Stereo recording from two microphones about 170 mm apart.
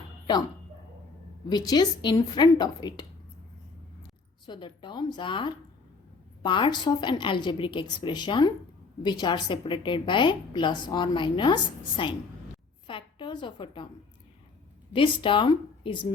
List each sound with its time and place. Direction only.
1.5 s a woman's voice: 25° left (ahead or behind)
4.4 s a woman's voice: 30° left (ahead or behind)
14.9 s a woman's voice: 30° left (ahead or behind)